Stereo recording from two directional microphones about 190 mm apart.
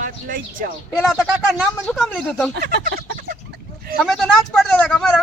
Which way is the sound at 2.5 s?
55° right (ahead or behind).